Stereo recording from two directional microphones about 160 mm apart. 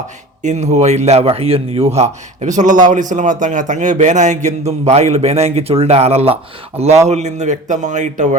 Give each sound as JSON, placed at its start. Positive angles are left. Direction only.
{"t": 0.4, "sound": "a man's voice", "side_deg": -45}